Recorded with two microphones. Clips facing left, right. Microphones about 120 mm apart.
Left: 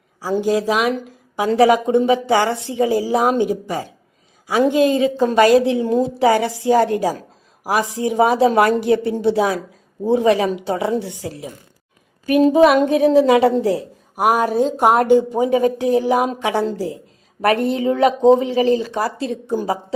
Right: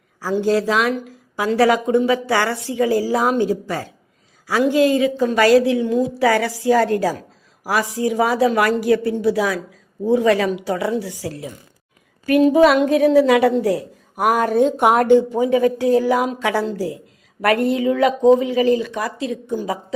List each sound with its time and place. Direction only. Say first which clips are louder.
0.4 s speech: even; 15° left (ahead or behind)
14.5 s a woman's voice: even; centre (ahead or behind)
15.0 s speech: even; 15° left (ahead or behind); by 19.8 s 35° left (ahead or behind)